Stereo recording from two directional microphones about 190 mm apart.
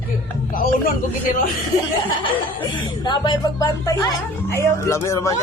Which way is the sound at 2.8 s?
25° left (ahead or behind).